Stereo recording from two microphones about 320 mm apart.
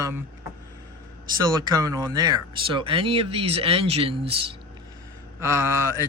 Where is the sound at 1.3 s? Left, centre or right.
Centre.